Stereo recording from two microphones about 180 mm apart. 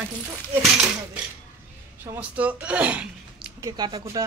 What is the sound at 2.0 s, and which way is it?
Speech, 10° right (ahead or behind).